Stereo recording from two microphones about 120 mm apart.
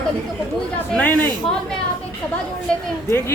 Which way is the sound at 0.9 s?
10° left (ahead or behind).